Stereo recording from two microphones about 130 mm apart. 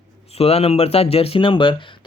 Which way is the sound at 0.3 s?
50° left (ahead or behind).